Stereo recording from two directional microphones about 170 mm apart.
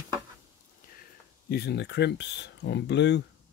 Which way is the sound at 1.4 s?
70° left (ahead or behind).